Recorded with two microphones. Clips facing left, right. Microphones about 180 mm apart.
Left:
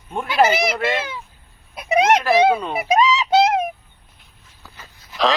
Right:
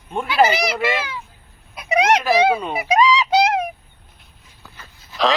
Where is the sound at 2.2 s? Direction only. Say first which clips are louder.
Left 1 dB; 5° right (ahead or behind).